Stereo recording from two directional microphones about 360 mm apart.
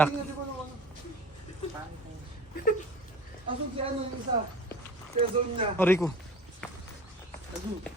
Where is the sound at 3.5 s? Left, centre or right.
Centre.